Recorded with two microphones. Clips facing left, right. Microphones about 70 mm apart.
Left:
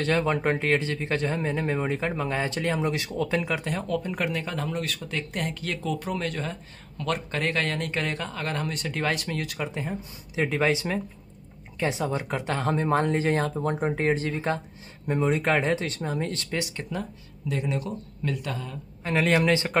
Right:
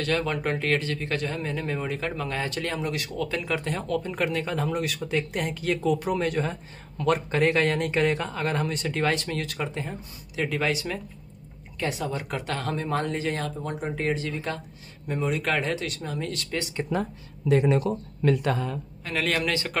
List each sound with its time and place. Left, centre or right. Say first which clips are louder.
0.0 s speech: left 2 dB; left
3.5 s speech: right 1 dB; centre
10.3 s speech: left 2 dB; left
16.9 s speech: right 6 dB; right
17.5 s speech: right 8 dB; right
19.0 s speech: left 5 dB; left